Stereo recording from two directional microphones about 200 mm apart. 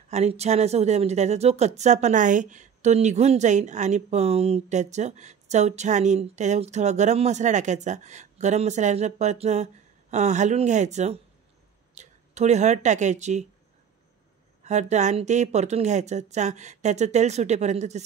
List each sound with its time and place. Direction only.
0.1 s speech: 35° right (ahead or behind)
14.6 s speech: 35° right (ahead or behind)